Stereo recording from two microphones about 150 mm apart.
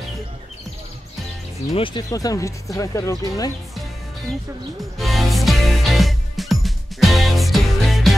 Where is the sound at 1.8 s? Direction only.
35° left (ahead or behind).